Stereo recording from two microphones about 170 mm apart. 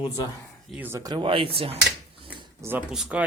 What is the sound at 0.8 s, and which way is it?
Speech, 15° right (ahead or behind).